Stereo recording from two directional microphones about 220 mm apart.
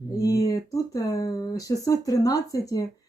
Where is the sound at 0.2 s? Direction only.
15° left (ahead or behind).